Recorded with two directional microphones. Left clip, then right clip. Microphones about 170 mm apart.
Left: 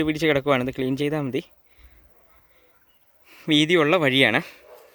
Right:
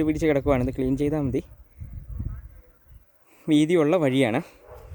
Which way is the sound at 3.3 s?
10° right (ahead or behind).